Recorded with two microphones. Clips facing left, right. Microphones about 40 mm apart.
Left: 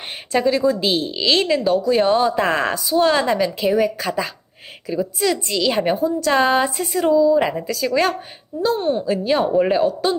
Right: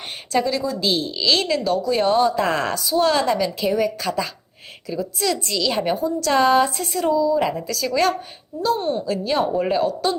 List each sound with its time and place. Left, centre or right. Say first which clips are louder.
0.3 s speech: left 4 dB; left